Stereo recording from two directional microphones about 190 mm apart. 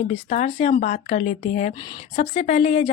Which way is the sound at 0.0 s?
40° left (ahead or behind).